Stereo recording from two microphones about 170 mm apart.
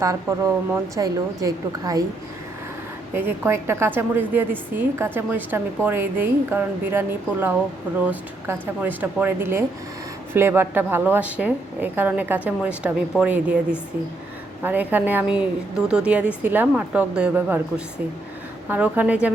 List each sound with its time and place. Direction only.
0.0 s a woman's voice: 20° right (ahead or behind)
3.2 s a woman's voice: 15° right (ahead or behind)